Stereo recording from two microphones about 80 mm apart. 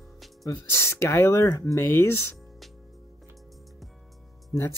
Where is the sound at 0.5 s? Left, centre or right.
Left.